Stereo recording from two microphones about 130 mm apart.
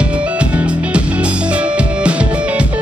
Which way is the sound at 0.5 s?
10° right (ahead or behind).